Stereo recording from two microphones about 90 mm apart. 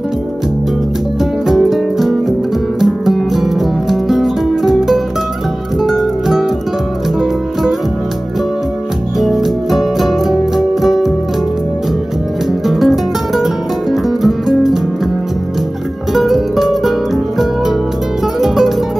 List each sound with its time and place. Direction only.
1.5 s music: 5° right (ahead or behind)
9.2 s music: centre (ahead or behind)
12.6 s music: centre (ahead or behind)
16.1 s music: centre (ahead or behind)